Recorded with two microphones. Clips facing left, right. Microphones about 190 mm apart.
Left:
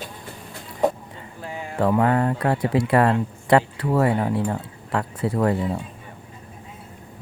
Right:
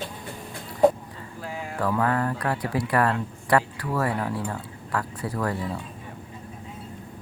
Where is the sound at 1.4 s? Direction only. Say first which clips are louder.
Left 1 dB; centre (ahead or behind).